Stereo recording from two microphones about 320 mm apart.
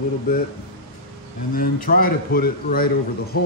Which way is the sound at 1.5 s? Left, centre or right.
Left.